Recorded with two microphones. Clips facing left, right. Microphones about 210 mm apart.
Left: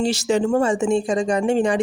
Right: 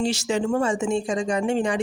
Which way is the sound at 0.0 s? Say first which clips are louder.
Left 4 dB; 35° left (ahead or behind).